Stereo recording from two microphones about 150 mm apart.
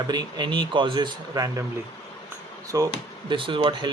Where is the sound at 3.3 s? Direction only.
35° right (ahead or behind).